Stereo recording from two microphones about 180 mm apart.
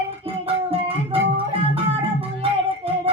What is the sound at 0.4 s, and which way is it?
Music, 35° right (ahead or behind).